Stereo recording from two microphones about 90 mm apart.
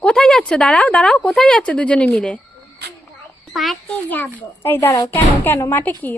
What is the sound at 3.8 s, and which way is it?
A woman's voice, 20° left (ahead or behind).